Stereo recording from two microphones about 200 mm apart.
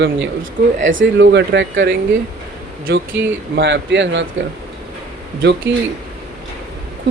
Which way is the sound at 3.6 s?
65° right (ahead or behind).